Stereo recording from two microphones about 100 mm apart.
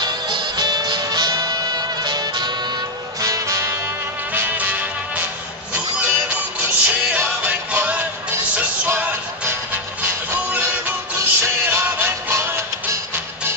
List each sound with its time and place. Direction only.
0.0 s music: 45° right (ahead or behind)
3.2 s music: 35° right (ahead or behind)
4.3 s music: 15° right (ahead or behind)